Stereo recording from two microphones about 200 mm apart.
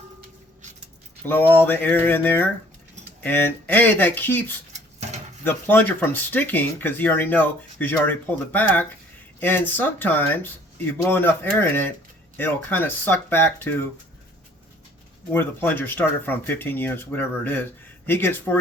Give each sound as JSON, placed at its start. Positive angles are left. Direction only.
{"t": 1.3, "sound": "speech", "side_deg": 10}
{"t": 4.7, "sound": "a sound", "side_deg": -35}
{"t": 5.5, "sound": "speech", "side_deg": 10}
{"t": 15.3, "sound": "speech", "side_deg": 10}